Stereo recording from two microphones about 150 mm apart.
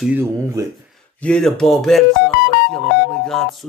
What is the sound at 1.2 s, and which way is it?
Speech, 5° left (ahead or behind).